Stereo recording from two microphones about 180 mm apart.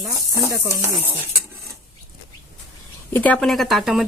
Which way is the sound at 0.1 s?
15° right (ahead or behind).